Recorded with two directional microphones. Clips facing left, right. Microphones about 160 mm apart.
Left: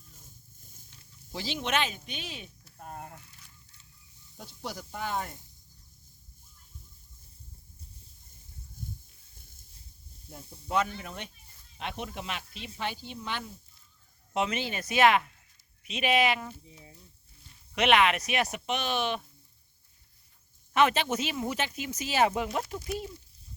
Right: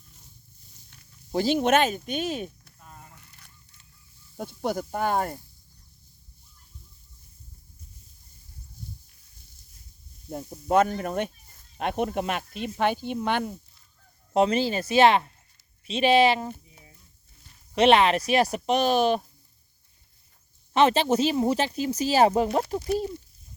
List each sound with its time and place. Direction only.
0.2 s wild animals: 50° left (ahead or behind)
0.9 s speech: 50° right (ahead or behind)
2.7 s a sound: 50° left (ahead or behind)
4.4 s speech: 55° right (ahead or behind)
10.2 s speech: 50° right (ahead or behind)
14.3 s speech: 35° right (ahead or behind)
17.7 s speech: 30° right (ahead or behind)
20.7 s speech: 30° right (ahead or behind)